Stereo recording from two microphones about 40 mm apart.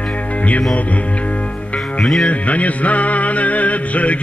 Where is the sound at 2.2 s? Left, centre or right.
Left.